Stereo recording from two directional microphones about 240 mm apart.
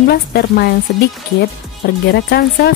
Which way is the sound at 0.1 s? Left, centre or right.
Left.